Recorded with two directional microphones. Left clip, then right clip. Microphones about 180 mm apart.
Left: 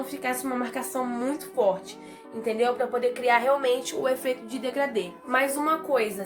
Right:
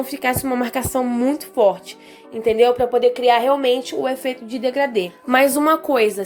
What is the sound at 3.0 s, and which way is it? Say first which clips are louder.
A woman's voice: right 6 dB; 25° right (ahead or behind).